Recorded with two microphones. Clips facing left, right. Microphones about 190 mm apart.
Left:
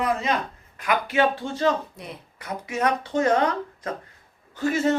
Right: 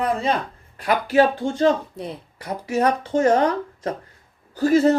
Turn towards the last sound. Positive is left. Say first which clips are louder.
# right 6 dB
turn(degrees=-35)  # may be behind; listen again after turning